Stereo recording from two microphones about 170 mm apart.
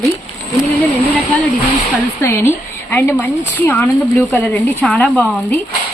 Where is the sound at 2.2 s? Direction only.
15° left (ahead or behind).